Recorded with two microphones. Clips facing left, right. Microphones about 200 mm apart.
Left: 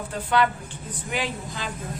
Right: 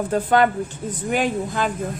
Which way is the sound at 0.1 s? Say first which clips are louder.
Right 5 dB; 45° right (ahead or behind).